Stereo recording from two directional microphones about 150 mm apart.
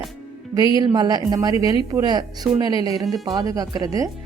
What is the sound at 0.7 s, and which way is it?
A woman's voice, 30° right (ahead or behind).